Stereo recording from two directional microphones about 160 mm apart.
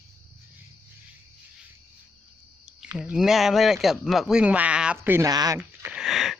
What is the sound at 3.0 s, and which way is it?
Speech, centre (ahead or behind).